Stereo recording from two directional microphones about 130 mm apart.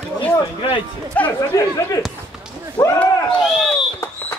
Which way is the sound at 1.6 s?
25° left (ahead or behind).